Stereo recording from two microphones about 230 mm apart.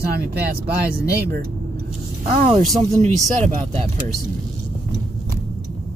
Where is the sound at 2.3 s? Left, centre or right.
Right.